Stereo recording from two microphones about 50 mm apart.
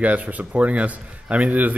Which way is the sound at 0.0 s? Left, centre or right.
Right.